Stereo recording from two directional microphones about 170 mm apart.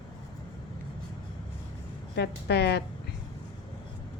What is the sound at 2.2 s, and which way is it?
Speech, 80° left.